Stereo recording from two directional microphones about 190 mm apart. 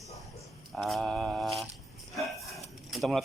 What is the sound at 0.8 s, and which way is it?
Mantra, centre (ahead or behind).